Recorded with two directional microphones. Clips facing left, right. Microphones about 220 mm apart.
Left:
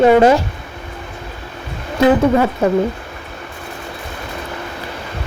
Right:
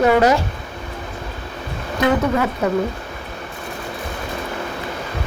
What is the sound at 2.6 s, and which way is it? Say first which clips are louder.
Speech: left 3 dB; 30° left (ahead or behind).